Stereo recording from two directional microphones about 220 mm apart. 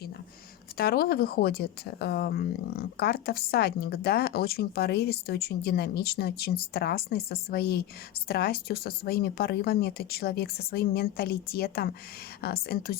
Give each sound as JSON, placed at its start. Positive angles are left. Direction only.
{"t": 0.8, "sound": "speech", "side_deg": 45}